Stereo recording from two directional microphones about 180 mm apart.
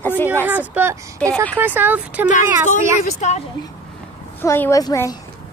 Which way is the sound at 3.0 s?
40° left (ahead or behind).